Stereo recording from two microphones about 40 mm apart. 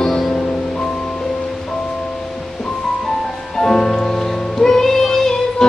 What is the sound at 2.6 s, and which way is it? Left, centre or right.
Music, centre.